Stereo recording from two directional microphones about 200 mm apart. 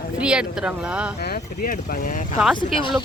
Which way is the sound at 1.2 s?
50° left (ahead or behind).